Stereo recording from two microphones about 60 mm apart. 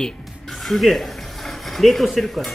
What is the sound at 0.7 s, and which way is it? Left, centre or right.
Speech, centre.